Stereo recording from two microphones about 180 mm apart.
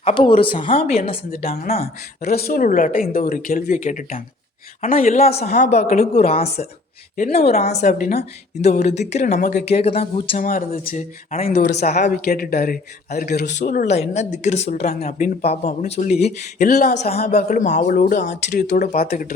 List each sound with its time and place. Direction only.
0.0 s speech: 30° left (ahead or behind)
2.2 s speech: 55° left (ahead or behind)
4.8 s speech: 35° left (ahead or behind)
10.3 s speech: 50° left (ahead or behind)
11.4 s speech: 65° left (ahead or behind)
11.9 s speech: 40° left (ahead or behind)
12.2 s speech: 60° left (ahead or behind)
13.6 s speech: 45° left (ahead or behind)
16.6 s speech: 60° left (ahead or behind)
16.9 s speech: 40° left (ahead or behind); by 19.3 s 55° left (ahead or behind)